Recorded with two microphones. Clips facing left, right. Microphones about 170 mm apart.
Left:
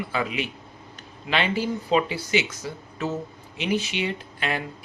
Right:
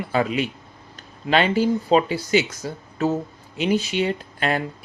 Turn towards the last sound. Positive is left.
turn(degrees=-45)  # may be behind; listen again after turning